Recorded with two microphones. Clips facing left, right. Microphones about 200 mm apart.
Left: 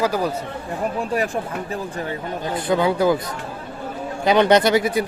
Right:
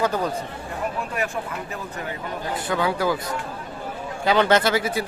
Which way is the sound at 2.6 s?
20° left (ahead or behind).